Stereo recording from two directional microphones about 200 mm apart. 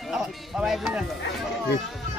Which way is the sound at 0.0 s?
Centre (ahead or behind).